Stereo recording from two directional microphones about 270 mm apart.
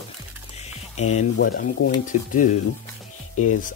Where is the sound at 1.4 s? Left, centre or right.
Left.